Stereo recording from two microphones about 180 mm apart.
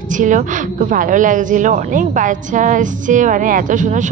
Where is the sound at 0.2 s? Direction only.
45° right (ahead or behind).